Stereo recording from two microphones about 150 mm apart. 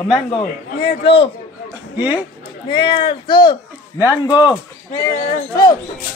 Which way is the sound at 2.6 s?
35° left (ahead or behind).